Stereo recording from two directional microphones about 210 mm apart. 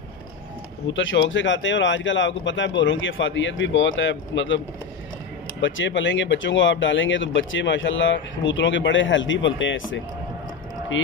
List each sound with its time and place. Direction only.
0.8 s speech: 60° left (ahead or behind)
5.6 s speech: 65° left (ahead or behind)